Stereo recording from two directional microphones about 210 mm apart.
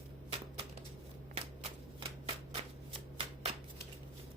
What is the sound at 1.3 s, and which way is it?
Shuffling cards, 25° right (ahead or behind).